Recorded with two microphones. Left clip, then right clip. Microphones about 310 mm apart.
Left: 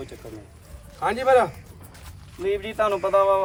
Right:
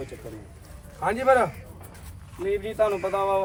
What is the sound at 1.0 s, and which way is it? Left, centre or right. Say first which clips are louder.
Speech: left 1 dB; centre.